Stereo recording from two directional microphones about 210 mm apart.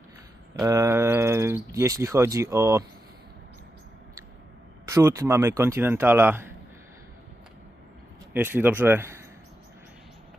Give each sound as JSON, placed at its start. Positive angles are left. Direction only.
{"t": 0.6, "sound": "speech", "side_deg": -15}
{"t": 4.8, "sound": "speech", "side_deg": -15}
{"t": 8.3, "sound": "speech", "side_deg": -10}